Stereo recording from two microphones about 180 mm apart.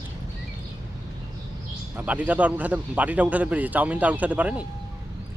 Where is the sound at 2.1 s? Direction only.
10° right (ahead or behind).